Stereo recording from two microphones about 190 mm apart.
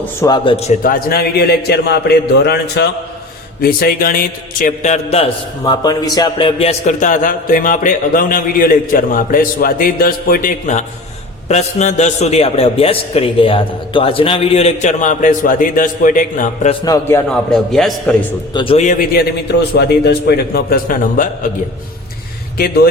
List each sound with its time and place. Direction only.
0.2 s a man's voice: 25° left (ahead or behind)
0.8 s a man's voice: 50° left (ahead or behind)
5.6 s a man's voice: 20° left (ahead or behind); by 16.7 s 45° left (ahead or behind)
16.8 s a man's voice: 15° left (ahead or behind)
17.2 s a man's voice: 5° left (ahead or behind)
18.5 s a man's voice: 30° left (ahead or behind)
18.9 s speech: 50° left (ahead or behind)
22.5 s speech: 55° left (ahead or behind)